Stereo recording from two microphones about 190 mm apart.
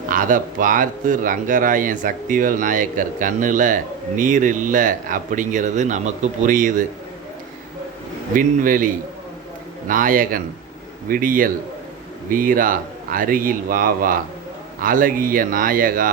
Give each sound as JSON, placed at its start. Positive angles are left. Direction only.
{"t": 0.1, "sound": "a man's voice", "side_deg": -45}
{"t": 8.4, "sound": "a man's voice", "side_deg": -45}
{"t": 9.9, "sound": "a man's voice", "side_deg": -45}